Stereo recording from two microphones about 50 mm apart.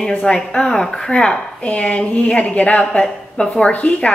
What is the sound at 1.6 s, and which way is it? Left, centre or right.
A woman's voice, left.